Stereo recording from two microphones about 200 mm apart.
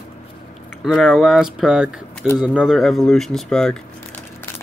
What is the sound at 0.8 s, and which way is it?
Speech, centre (ahead or behind).